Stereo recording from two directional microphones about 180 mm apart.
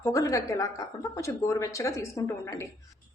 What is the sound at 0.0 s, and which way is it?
A woman's voice, 15° left (ahead or behind).